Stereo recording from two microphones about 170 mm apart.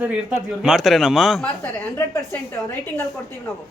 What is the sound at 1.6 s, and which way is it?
A woman's voice, 15° left (ahead or behind).